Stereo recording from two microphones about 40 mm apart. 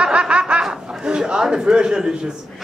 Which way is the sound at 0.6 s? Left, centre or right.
Right.